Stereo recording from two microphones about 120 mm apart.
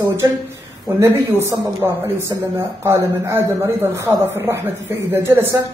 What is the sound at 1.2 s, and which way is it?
Speech, 20° right (ahead or behind).